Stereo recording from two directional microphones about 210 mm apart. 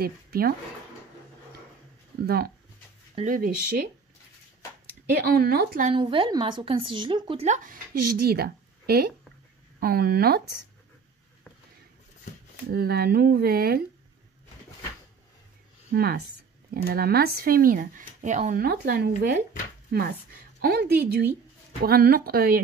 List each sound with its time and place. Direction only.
0.0 s speech: 45° right (ahead or behind)
2.2 s speech: 45° right (ahead or behind)
5.1 s speech: 45° right (ahead or behind)
5.9 s speech: 25° right (ahead or behind); by 10.4 s 50° right (ahead or behind)
12.7 s speech: 50° right (ahead or behind)
15.9 s speech: 50° right (ahead or behind)